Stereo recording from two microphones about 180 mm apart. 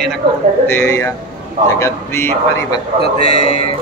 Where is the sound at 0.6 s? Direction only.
15° left (ahead or behind).